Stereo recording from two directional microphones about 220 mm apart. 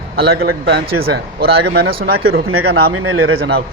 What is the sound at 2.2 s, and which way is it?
Speech, 70° right (ahead or behind).